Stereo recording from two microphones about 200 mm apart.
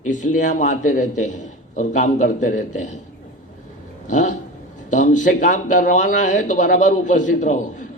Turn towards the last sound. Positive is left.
turn(degrees=40)  # may be behind; listen again after turning